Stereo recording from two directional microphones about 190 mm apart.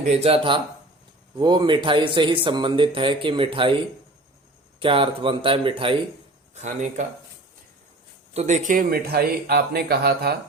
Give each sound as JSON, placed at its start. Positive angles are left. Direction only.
{"t": 0.0, "sound": "speech", "side_deg": -35}
{"t": 4.8, "sound": "speech", "side_deg": -30}
{"t": 6.5, "sound": "speech", "side_deg": -40}
{"t": 8.3, "sound": "speech", "side_deg": -35}